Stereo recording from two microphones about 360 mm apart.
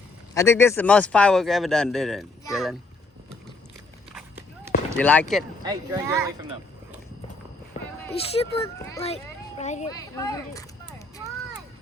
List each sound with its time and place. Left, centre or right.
0.3 s speech: centre
4.1 s walk: centre
4.9 s speech: centre
5.6 s speech: centre
8.0 s a child's voice: centre